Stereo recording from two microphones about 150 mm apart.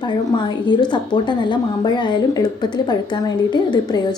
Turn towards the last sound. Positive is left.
turn(degrees=30)  # may be behind; listen again after turning